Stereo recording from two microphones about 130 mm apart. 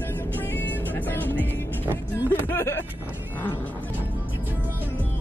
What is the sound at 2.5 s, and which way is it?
Vehicle, 20° left (ahead or behind).